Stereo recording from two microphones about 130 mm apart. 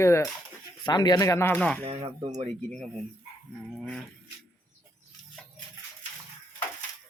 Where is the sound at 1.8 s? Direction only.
55° right (ahead or behind).